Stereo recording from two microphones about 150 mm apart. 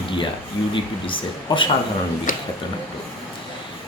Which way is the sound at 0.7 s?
35° left (ahead or behind).